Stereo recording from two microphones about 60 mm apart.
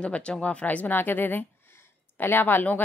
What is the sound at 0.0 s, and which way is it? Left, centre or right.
A woman's voice, centre.